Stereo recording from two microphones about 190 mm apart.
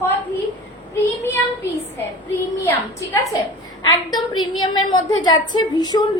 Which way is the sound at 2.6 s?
15° left (ahead or behind).